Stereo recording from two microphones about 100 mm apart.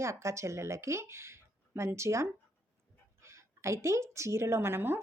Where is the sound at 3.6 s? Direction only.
30° right (ahead or behind).